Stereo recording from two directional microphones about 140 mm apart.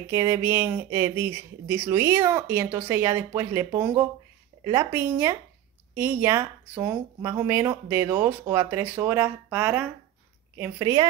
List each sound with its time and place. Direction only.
0.1 s speech: 20° right (ahead or behind)
5.1 s speech: 25° right (ahead or behind)
10.8 s speech: 25° right (ahead or behind)